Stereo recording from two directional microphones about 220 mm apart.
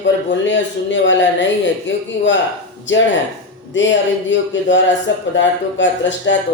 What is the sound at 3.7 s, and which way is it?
Speech, 55° left (ahead or behind).